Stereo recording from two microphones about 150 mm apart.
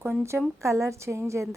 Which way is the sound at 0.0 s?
15° right (ahead or behind).